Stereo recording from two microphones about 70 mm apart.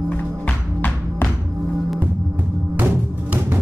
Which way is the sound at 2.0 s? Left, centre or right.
Right.